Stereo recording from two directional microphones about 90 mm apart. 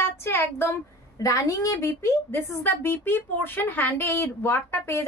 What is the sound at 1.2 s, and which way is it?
A woman's voice, 40° left (ahead or behind).